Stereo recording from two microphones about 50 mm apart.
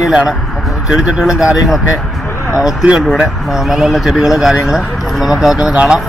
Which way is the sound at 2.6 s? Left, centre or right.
Centre.